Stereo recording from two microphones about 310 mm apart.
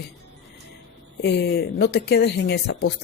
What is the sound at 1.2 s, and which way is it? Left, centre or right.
Speech, left.